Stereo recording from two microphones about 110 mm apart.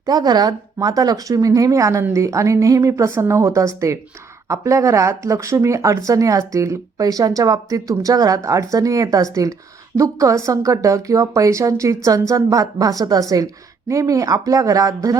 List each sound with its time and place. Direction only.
0.0 s a woman's voice: 35° right (ahead or behind)